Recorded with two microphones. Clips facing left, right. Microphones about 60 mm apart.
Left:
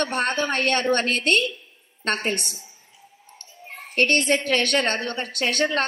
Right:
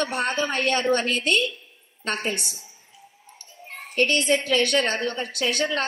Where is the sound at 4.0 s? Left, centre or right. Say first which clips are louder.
Left 1 dB; left.